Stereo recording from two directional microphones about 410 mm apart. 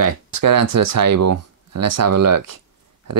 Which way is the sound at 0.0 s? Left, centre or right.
Right.